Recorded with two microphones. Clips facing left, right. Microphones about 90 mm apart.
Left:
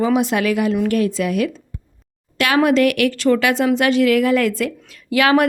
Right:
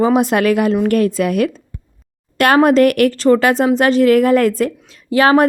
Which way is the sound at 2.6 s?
45° right (ahead or behind).